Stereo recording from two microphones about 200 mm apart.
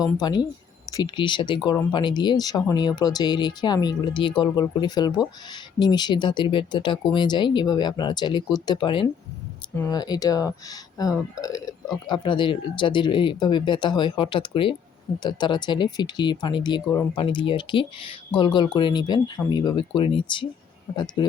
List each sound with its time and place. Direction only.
0.0 s speech: 20° left (ahead or behind)